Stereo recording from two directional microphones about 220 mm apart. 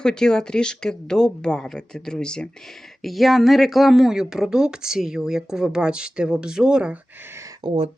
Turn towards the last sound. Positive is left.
turn(degrees=-20)  # may be behind; listen again after turning